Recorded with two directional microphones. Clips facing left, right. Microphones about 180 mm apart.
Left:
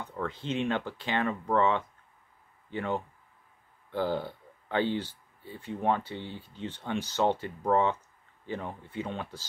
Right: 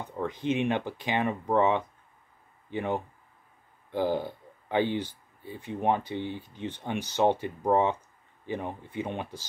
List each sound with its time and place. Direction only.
0.0 s speech: 15° right (ahead or behind)